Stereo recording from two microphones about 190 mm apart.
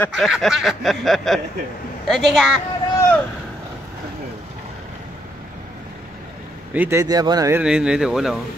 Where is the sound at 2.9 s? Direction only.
15° left (ahead or behind).